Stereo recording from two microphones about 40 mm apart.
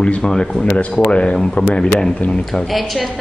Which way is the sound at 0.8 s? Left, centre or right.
Left.